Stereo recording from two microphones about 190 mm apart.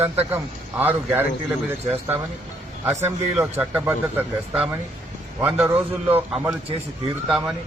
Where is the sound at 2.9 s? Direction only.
15° right (ahead or behind).